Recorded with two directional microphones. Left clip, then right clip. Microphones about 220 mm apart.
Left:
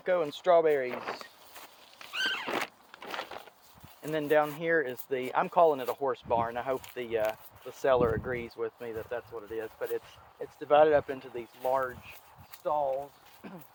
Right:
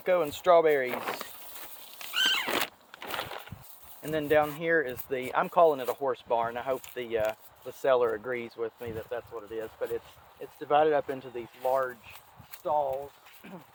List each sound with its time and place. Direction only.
0.0 s speech: 15° right (ahead or behind)
0.9 s speech: 50° right (ahead or behind)
2.1 s a sound: 40° right (ahead or behind)
3.0 s a sound: 25° right (ahead or behind)
4.1 s speech: centre (ahead or behind)
7.2 s speech: centre (ahead or behind); by 13.6 s 15° left (ahead or behind)